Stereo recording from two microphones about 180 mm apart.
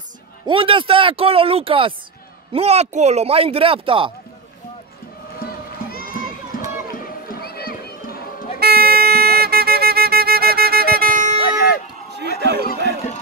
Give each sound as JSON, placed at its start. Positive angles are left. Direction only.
{"t": 0.5, "sound": "speech", "side_deg": -30}
{"t": 5.4, "sound": "crowd", "side_deg": 55}
{"t": 7.2, "sound": "run", "side_deg": 60}
{"t": 8.5, "sound": "music", "side_deg": -60}
{"t": 11.4, "sound": "a sound", "side_deg": 60}
{"t": 12.4, "sound": "a sound", "side_deg": -70}